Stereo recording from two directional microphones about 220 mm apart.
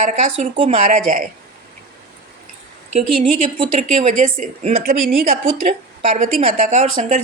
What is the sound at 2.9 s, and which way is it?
Speech, 35° right (ahead or behind).